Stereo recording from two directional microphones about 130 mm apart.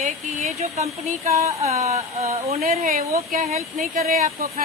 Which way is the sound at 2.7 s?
70° right (ahead or behind).